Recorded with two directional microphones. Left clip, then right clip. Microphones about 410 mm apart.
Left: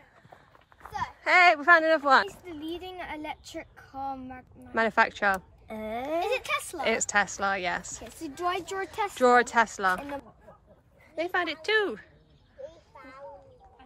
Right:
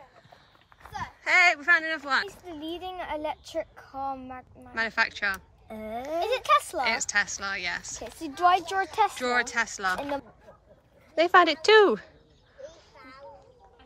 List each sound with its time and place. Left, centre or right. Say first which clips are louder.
0.8 s a child's voice: left 1 dB; centre
4.7 s a woman's voice: left 3 dB; centre
5.8 s a sound: left 1 dB; centre
6.2 s speech: right 6 dB; centre
6.8 s a woman's voice: even; centre
8.2 s speech: right 8 dB; centre
9.1 s a woman's voice: left 5 dB; centre
11.1 s speech: right 9 dB; centre
12.9 s a sound: left 1 dB; centre